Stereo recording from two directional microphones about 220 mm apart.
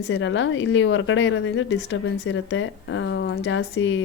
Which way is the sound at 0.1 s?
60° left (ahead or behind).